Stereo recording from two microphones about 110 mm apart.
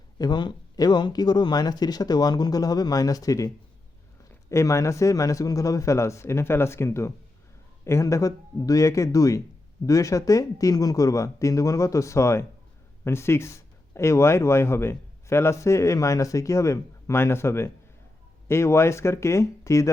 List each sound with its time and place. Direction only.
0.2 s speech: 45° left (ahead or behind)